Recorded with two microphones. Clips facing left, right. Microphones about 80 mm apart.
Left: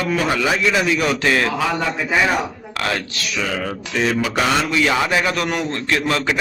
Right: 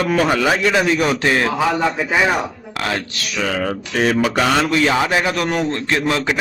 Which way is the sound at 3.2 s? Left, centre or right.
Right.